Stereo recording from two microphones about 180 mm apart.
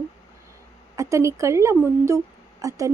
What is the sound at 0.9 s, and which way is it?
Speech, 15° right (ahead or behind).